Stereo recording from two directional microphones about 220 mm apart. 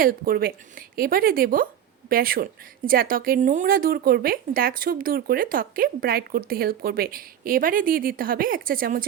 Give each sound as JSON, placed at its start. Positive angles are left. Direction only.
{"t": 0.0, "sound": "a woman's voice", "side_deg": -40}